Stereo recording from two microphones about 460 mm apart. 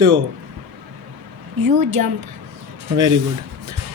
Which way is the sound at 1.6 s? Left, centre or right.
Right.